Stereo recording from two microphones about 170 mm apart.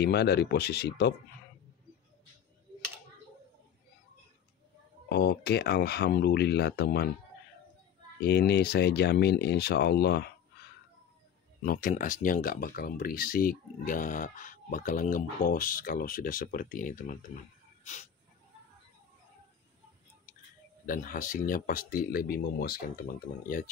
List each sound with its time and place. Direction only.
0.0 s speech: 75° left (ahead or behind)
5.1 s speech: 75° left (ahead or behind)
8.2 s speech: 75° left (ahead or behind)
11.6 s speech: 55° left (ahead or behind)
20.8 s speech: 55° left (ahead or behind)
23.4 s speech: 55° left (ahead or behind)